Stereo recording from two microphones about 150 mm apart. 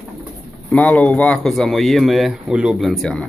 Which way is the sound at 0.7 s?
10° left (ahead or behind).